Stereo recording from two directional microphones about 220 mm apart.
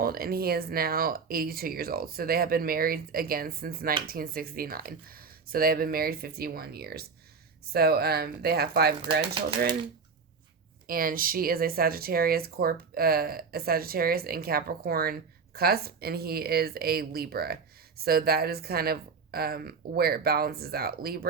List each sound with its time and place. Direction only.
0.0 s speech: 45° right (ahead or behind)
10.8 s speech: 40° right (ahead or behind)